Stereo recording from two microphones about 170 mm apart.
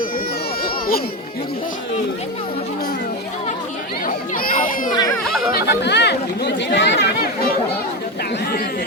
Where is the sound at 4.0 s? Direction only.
55° left (ahead or behind).